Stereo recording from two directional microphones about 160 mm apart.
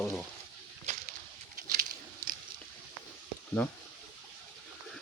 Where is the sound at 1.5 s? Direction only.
65° right (ahead or behind).